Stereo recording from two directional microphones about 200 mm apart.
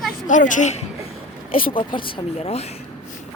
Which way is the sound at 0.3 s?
40° left (ahead or behind).